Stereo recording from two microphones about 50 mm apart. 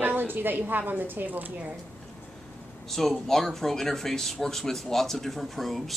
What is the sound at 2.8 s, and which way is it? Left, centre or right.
Speech, centre.